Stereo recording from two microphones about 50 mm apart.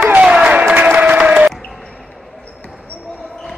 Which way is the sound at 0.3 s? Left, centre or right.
Right.